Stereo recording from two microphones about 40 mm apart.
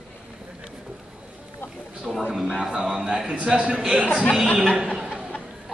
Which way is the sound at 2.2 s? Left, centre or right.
Centre.